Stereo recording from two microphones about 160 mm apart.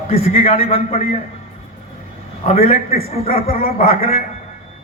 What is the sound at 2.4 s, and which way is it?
Speech, 40° left (ahead or behind).